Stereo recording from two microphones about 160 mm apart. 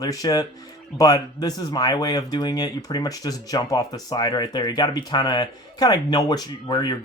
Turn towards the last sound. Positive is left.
turn(degrees=25)  # may be behind; listen again after turning